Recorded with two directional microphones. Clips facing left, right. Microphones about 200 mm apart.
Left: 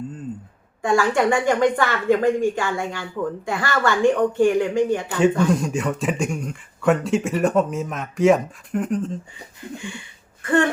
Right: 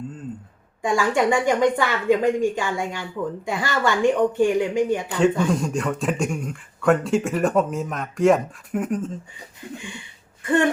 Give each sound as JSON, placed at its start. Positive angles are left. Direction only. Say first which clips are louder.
{"t": 0.8, "sound": "a woman's voice", "louder": "left 2 dB", "side_deg": -15}
{"t": 5.5, "sound": "speech", "louder": "left 1 dB", "side_deg": 0}
{"t": 10.4, "sound": "throat clearing", "louder": "left 1 dB", "side_deg": -15}